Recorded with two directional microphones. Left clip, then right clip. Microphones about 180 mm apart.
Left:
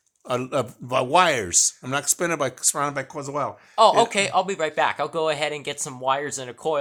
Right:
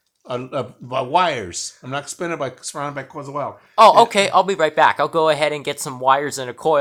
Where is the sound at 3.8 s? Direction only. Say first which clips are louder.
Right 6 dB; 15° right (ahead or behind).